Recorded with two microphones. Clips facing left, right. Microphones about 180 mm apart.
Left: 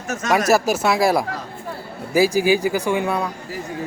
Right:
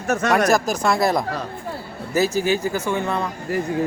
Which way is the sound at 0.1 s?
60° right (ahead or behind).